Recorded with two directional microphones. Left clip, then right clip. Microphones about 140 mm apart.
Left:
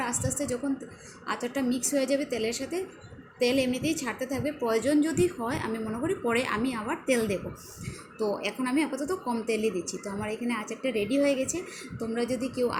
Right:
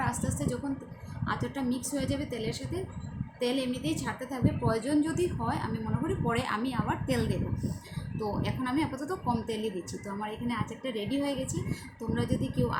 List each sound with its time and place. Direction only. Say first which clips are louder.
0.0 s a woman's voice: left 2 dB; 25° left (ahead or behind)